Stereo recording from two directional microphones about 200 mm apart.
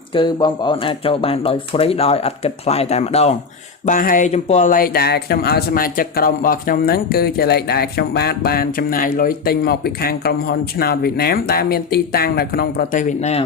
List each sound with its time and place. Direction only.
0.1 s speech: 25° left (ahead or behind)
3.8 s speech: 40° left (ahead or behind)